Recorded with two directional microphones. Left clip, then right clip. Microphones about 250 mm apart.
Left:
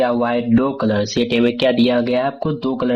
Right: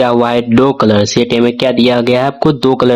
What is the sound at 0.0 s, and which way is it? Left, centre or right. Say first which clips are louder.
Speech: right 7 dB; right.